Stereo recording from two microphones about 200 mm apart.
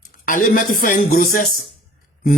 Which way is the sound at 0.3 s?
40° left (ahead or behind).